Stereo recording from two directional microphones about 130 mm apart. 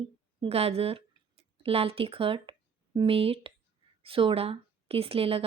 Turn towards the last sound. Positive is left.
turn(degrees=-45)  # may be behind; listen again after turning